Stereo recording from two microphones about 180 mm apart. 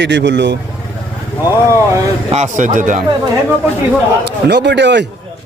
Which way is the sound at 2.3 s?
40° right (ahead or behind).